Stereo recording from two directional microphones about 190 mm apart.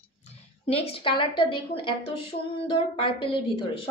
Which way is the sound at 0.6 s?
30° left (ahead or behind).